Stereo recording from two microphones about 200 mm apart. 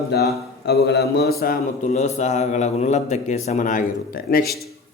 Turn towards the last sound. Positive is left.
turn(degrees=45)  # may be behind; listen again after turning